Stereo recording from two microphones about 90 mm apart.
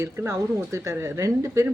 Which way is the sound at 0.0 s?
35° right (ahead or behind).